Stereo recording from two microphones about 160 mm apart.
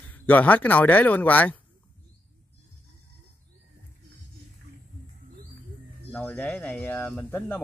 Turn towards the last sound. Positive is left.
turn(degrees=10)  # may be behind; listen again after turning